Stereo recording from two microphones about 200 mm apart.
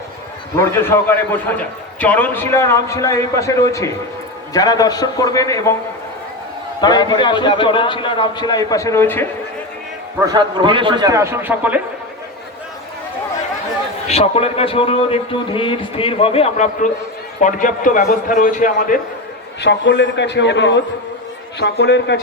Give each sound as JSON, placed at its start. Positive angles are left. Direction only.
{"t": 0.5, "sound": "a man's voice", "side_deg": 15}
{"t": 6.8, "sound": "a man's voice", "side_deg": 20}
{"t": 10.2, "sound": "a man's voice", "side_deg": -20}
{"t": 14.1, "sound": "a man's voice", "side_deg": 30}
{"t": 19.6, "sound": "a man's voice", "side_deg": 60}